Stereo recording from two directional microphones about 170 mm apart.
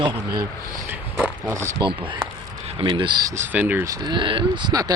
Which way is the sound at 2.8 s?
30° right (ahead or behind).